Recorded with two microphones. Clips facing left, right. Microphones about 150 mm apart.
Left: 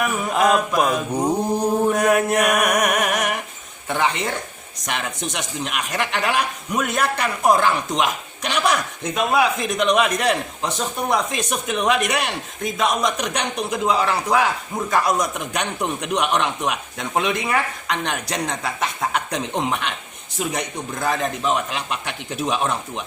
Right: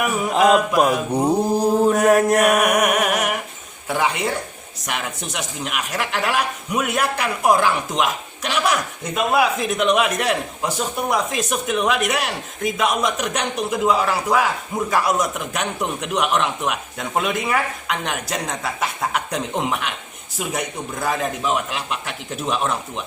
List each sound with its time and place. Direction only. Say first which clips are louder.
0.0 s music: right 2 dB; 10° right (ahead or behind)
2.0 s mantra: right 3 dB; 35° right (ahead or behind)
2.4 s music: right 2 dB; 5° right (ahead or behind)
3.8 s a sound: right 1 dB; 10° right (ahead or behind)
4.9 s speech: left 1 dB; 5° right (ahead or behind)